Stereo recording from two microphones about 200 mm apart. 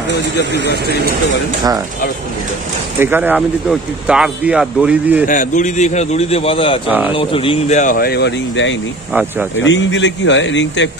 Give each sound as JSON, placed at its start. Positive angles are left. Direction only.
{"t": 3.0, "sound": "speech", "side_deg": -10}
{"t": 5.3, "sound": "speech", "side_deg": 40}